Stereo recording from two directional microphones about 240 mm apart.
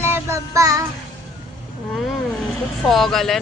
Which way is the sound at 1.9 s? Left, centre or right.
Centre.